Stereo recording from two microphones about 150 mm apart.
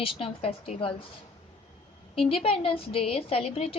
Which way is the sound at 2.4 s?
40° left (ahead or behind).